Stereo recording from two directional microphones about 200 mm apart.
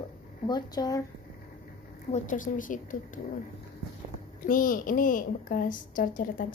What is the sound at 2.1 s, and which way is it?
A woman's voice, 40° left (ahead or behind).